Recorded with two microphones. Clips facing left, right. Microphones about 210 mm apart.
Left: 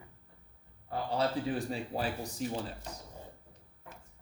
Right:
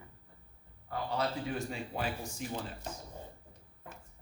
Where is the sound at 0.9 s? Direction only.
30° left (ahead or behind).